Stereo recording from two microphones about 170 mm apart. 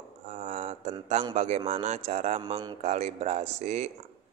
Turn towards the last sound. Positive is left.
turn(degrees=-40)  # may be behind; listen again after turning